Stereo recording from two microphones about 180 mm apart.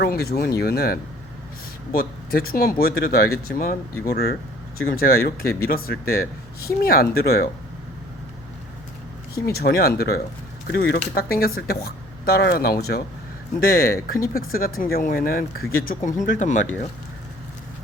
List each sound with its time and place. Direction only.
0.0 s speech: 60° left (ahead or behind)
9.3 s speech: 60° left (ahead or behind)
15.9 s speech: 45° left (ahead or behind)